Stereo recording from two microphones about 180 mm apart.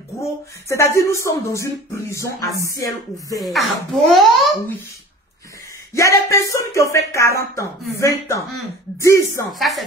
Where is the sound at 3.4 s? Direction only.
Centre (ahead or behind).